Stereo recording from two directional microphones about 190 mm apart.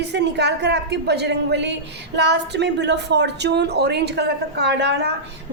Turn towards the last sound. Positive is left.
turn(degrees=-65)  # may be behind; listen again after turning